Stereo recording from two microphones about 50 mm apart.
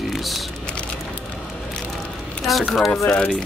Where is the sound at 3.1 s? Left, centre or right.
Left.